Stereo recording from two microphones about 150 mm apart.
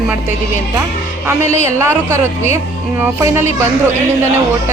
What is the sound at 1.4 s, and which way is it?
Speech, 45° left (ahead or behind).